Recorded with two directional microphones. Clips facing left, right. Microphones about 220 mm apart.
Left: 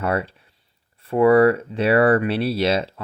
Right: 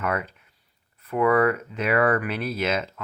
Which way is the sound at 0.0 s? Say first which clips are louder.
Left 4 dB; 30° left (ahead or behind).